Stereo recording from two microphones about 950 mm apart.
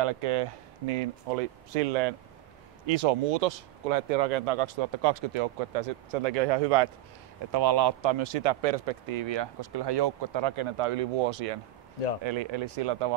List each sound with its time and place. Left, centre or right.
0.0 s speech: right
2.9 s speech: right
7.5 s speech: right